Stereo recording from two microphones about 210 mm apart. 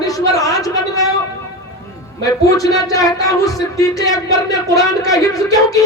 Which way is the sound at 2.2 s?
15° left (ahead or behind).